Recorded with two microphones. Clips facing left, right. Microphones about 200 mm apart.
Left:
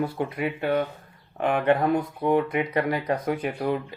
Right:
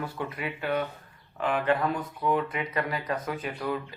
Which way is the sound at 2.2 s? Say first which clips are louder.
Left 3 dB; 25° left (ahead or behind).